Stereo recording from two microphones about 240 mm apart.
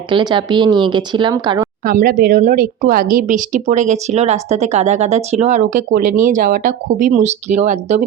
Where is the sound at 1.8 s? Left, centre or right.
Right.